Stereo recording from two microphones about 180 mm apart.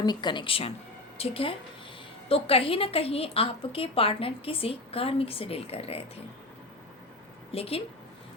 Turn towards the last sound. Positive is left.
turn(degrees=35)  # may be behind; listen again after turning